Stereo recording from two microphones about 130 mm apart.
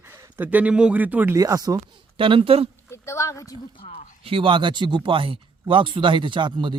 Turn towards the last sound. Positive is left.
turn(degrees=-40)  # may be behind; listen again after turning